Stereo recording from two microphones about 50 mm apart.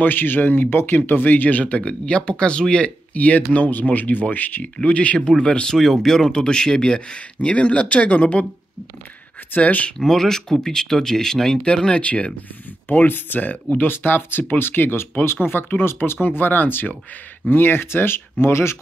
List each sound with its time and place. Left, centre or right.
0.0 s speech: left
1.8 s speech: left
5.8 s speech: centre; by 8.5 s left
9.6 s speech: left
9.9 s speech: centre; by 12.3 s left
13.0 s speech: left
13.8 s speech: left
16.3 s speech: left